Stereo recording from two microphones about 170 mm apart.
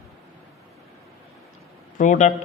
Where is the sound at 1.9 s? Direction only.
45° left (ahead or behind).